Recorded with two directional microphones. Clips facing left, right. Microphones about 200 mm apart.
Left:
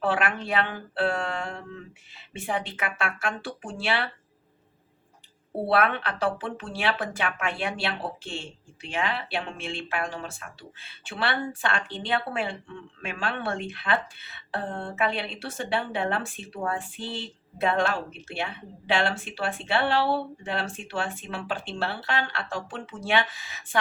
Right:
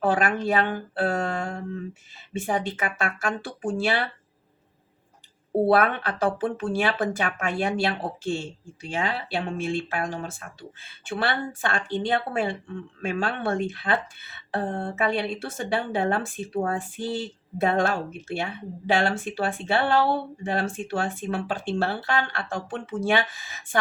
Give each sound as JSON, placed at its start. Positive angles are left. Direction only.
{"t": 0.0, "sound": "speech", "side_deg": -45}
{"t": 5.6, "sound": "speech", "side_deg": -45}